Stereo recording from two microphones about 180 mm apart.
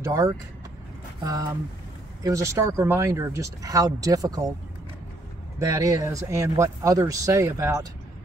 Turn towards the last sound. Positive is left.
turn(degrees=-15)  # may be behind; listen again after turning